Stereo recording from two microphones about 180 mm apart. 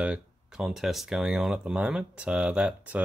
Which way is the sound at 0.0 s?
5° right (ahead or behind).